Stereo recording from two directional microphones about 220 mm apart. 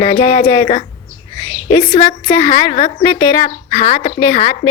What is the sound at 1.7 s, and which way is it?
A woman's voice, 20° left (ahead or behind).